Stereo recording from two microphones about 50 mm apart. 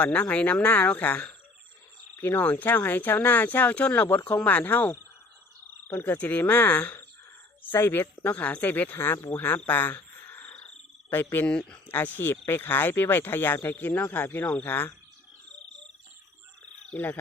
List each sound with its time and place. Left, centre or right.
0.0 s speech: left
7.8 s speech: left
8.2 s speech: left
9.6 s a sound: left
11.1 s speech: left
11.4 s speech: centre
11.9 s speech: left